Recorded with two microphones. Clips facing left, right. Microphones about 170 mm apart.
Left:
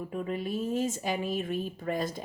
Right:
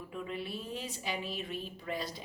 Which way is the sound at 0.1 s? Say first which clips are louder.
Left 5 dB; 45° left (ahead or behind).